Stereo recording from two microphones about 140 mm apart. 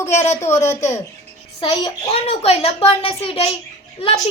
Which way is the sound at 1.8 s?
45° left (ahead or behind).